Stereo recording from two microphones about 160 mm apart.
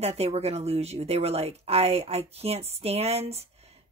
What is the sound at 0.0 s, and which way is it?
Speech, 40° right (ahead or behind).